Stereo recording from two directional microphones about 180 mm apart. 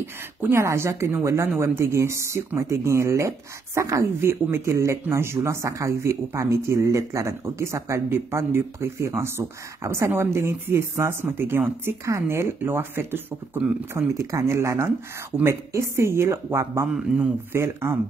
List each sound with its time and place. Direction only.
0.0 s a woman's voice: 15° right (ahead or behind)